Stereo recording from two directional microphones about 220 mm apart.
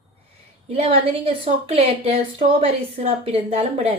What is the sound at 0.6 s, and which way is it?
A woman's voice, 25° right (ahead or behind).